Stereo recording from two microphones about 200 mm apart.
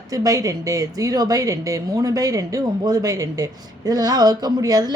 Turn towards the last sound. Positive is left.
turn(degrees=-20)  # may be behind; listen again after turning